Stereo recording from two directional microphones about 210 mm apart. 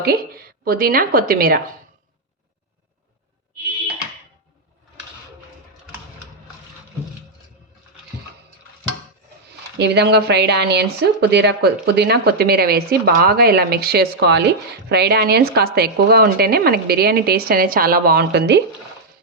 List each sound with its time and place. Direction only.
0.0 s a woman's voice: 45° right (ahead or behind)
9.7 s speech: 50° right (ahead or behind)